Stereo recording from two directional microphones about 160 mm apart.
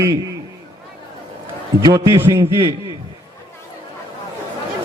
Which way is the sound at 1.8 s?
25° right (ahead or behind).